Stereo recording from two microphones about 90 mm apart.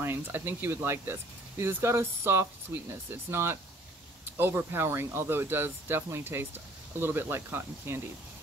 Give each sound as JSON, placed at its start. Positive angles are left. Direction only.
{"t": 0.0, "sound": "speech", "side_deg": -25}